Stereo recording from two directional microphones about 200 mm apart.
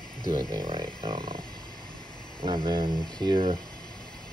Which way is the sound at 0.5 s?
20° right (ahead or behind).